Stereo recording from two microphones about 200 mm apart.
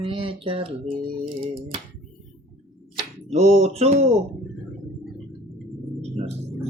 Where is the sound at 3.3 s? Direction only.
35° right (ahead or behind).